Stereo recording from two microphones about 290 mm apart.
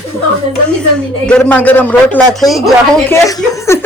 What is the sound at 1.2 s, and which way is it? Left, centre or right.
A man's voice, centre.